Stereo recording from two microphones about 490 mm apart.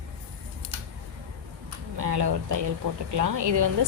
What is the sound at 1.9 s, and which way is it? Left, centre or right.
A woman's voice, right.